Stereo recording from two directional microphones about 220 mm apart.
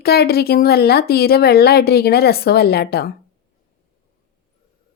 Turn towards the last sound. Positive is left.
turn(degrees=45)  # may be behind; listen again after turning